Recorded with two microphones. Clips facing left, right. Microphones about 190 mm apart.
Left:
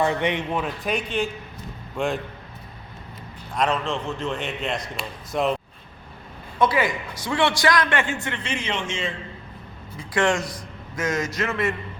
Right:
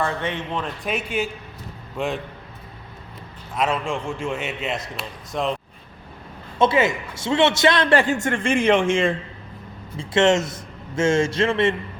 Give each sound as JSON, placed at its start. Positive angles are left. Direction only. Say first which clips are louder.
{"t": 0.0, "sound": "a man's voice", "louder": "left 3 dB", "side_deg": 15}
{"t": 3.5, "sound": "a man's voice", "louder": "even", "side_deg": -5}
{"t": 6.6, "sound": "a man's voice", "louder": "right 3 dB", "side_deg": -25}
{"t": 10.0, "sound": "a man's voice", "louder": "right 5 dB", "side_deg": -25}